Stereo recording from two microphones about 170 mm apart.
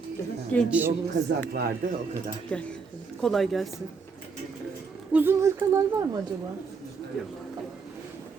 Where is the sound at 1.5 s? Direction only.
65° right (ahead or behind).